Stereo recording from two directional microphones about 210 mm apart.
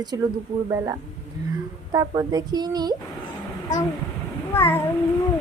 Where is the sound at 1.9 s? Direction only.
20° right (ahead or behind).